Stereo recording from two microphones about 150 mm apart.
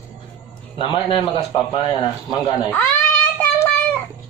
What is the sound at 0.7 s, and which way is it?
A man's voice, 35° left (ahead or behind).